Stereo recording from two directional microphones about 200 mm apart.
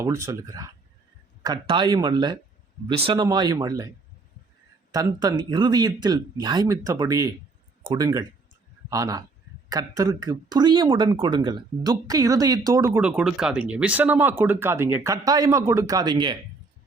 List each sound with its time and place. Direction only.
0.0 s speech: 15° right (ahead or behind)
4.9 s speech: 20° right (ahead or behind)